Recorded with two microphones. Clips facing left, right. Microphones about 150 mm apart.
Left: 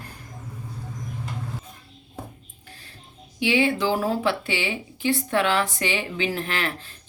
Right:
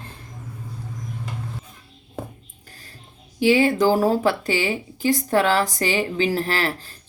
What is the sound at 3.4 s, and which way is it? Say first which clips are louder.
Speech: right 5 dB; 40° right (ahead or behind).